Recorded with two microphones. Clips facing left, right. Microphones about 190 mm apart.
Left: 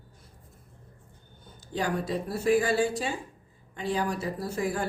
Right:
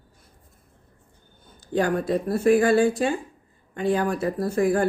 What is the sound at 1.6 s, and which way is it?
Speech, 55° right (ahead or behind).